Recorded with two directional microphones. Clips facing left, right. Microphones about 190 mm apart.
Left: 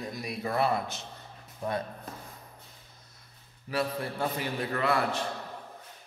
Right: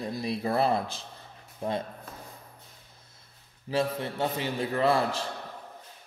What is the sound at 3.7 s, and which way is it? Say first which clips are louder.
Speech: right 3 dB; 25° right (ahead or behind).